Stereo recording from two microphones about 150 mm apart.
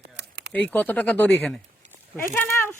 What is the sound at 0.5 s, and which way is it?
Speech, 10° left (ahead or behind).